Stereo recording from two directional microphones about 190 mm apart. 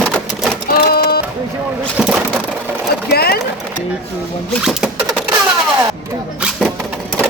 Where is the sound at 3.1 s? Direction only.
55° left (ahead or behind).